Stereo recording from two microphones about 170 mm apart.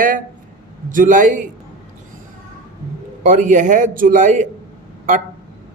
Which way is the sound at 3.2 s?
50° right (ahead or behind).